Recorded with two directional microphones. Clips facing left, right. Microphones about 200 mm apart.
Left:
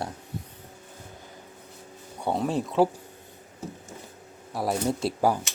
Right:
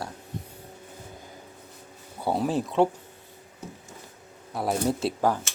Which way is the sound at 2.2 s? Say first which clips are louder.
Right 1 dB; 5° right (ahead or behind).